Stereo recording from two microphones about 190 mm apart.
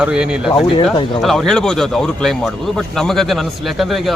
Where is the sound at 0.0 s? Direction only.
5° right (ahead or behind).